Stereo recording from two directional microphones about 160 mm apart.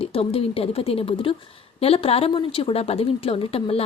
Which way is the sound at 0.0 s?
35° left (ahead or behind).